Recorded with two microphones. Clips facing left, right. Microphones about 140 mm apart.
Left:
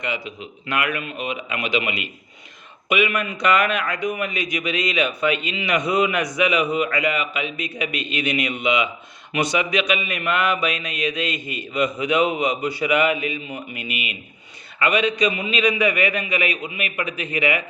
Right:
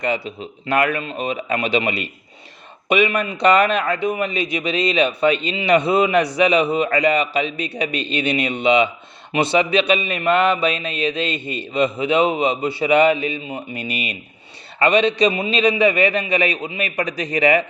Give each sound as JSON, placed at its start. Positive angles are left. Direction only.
{"t": 0.0, "sound": "speech", "side_deg": -35}
{"t": 9.3, "sound": "mantra", "side_deg": -25}
{"t": 14.8, "sound": "speech", "side_deg": -30}